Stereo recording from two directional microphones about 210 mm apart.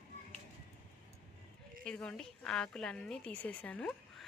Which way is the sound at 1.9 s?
5° left (ahead or behind).